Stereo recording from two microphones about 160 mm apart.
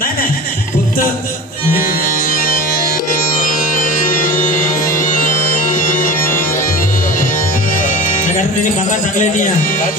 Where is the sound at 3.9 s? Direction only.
55° left (ahead or behind).